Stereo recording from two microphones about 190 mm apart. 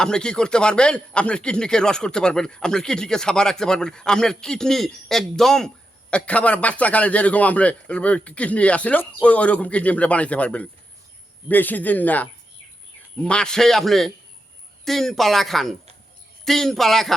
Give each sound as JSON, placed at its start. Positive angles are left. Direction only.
{"t": 0.0, "sound": "speech", "side_deg": 5}